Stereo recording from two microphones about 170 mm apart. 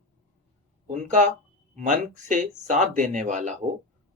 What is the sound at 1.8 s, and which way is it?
Speech, 45° right (ahead or behind).